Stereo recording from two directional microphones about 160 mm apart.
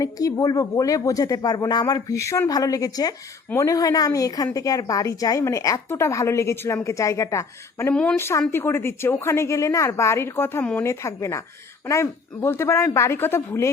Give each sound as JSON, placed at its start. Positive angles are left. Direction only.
{"t": 0.0, "sound": "a woman's voice", "side_deg": 20}